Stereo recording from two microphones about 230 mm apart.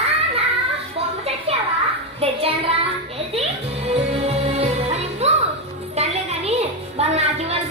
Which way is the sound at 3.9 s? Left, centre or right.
Right.